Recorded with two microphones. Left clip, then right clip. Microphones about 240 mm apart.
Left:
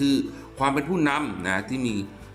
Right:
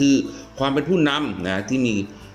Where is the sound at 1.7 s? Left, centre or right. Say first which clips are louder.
Right 7 dB; right.